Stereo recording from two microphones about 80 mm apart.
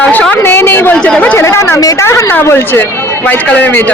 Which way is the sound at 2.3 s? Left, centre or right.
Left.